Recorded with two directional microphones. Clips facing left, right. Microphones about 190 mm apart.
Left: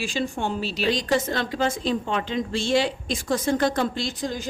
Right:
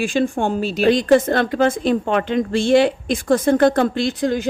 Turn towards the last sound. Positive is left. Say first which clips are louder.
# right 9 dB
turn(degrees=-60)  # may be behind; listen again after turning